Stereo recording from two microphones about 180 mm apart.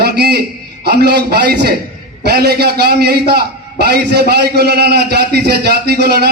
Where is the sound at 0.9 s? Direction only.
65° right (ahead or behind).